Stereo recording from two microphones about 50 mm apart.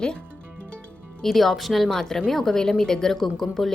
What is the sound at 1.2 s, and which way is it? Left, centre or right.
Speech, centre.